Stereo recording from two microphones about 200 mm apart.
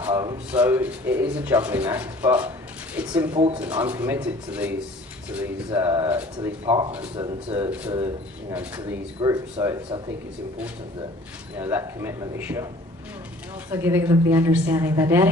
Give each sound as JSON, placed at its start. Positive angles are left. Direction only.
{"t": 0.0, "sound": "a sound", "side_deg": -15}
{"t": 0.5, "sound": "speech", "side_deg": -5}
{"t": 3.3, "sound": "speech", "side_deg": -20}
{"t": 3.6, "sound": "speech", "side_deg": -10}
{"t": 8.5, "sound": "speech", "side_deg": -10}
{"t": 11.5, "sound": "speech", "side_deg": -10}
{"t": 13.7, "sound": "speech", "side_deg": -10}